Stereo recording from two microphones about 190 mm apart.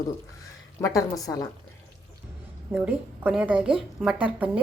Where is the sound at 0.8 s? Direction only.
15° left (ahead or behind).